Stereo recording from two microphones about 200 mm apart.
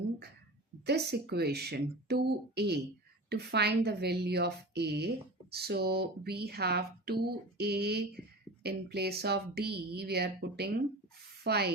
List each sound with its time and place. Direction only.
0.9 s speech: 55° right (ahead or behind)